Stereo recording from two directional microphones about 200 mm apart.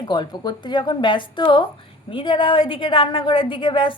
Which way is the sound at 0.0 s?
20° left (ahead or behind).